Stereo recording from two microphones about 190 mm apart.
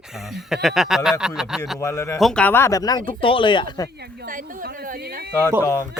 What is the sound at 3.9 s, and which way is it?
Speech, 60° right (ahead or behind).